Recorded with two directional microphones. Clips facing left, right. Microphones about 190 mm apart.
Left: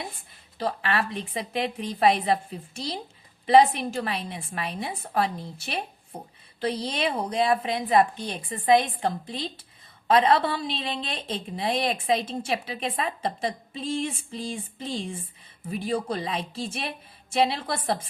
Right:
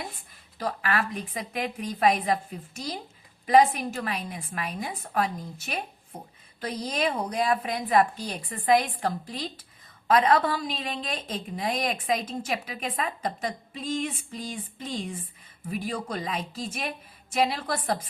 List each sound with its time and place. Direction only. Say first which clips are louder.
0.6 s a woman's voice: left 1 dB; 30° left (ahead or behind)